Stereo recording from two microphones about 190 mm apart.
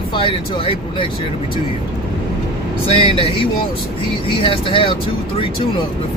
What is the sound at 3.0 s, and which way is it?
Speech, 30° left (ahead or behind).